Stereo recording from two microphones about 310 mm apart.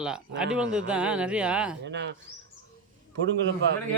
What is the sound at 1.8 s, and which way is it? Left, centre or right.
Speech, right.